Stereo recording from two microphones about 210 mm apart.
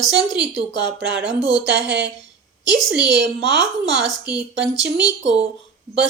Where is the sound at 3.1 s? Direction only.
55° right (ahead or behind).